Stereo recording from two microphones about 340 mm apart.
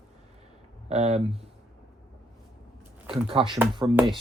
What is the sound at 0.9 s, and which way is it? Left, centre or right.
Speech, centre.